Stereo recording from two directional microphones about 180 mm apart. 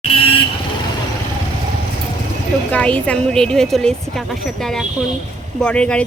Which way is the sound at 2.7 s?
5° left (ahead or behind).